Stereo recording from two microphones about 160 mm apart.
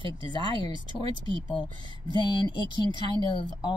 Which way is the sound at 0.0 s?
25° left (ahead or behind).